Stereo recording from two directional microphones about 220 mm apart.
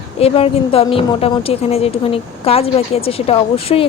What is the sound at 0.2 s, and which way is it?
A woman's voice, 25° left (ahead or behind).